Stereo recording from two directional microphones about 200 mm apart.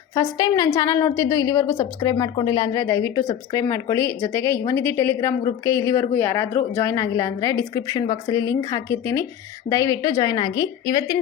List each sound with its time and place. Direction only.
0.1 s a woman's voice: 20° left (ahead or behind)